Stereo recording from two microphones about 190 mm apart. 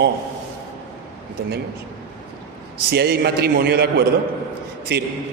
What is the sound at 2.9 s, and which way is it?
A man's voice, 60° right (ahead or behind).